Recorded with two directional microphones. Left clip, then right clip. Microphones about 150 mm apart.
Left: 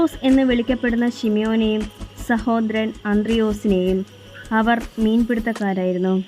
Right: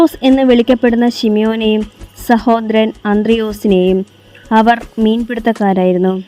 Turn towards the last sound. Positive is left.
turn(degrees=-45)  # may be behind; listen again after turning